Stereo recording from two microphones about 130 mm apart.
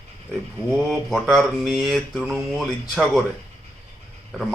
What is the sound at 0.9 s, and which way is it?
Speech, centre (ahead or behind).